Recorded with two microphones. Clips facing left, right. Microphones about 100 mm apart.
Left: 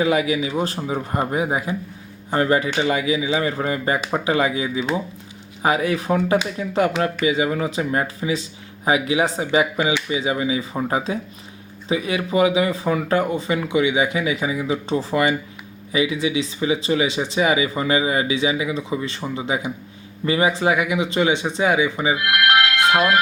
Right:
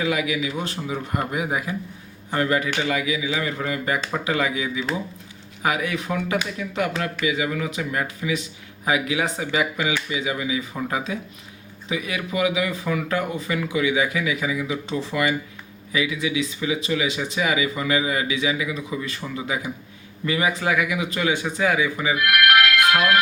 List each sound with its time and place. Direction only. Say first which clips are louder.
0.0 s speech: left 4 dB; 30° left (ahead or behind)